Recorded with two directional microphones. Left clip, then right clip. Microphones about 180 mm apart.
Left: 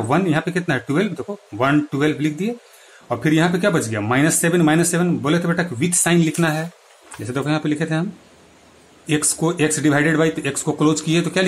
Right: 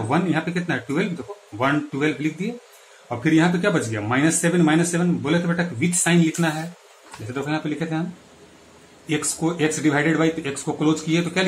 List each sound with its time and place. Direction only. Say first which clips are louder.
0.1 s speech: left 3 dB; 60° left (ahead or behind)
9.0 s speech: left 4 dB; 65° left (ahead or behind)